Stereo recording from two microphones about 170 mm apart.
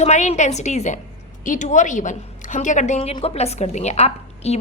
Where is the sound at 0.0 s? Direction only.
40° left (ahead or behind).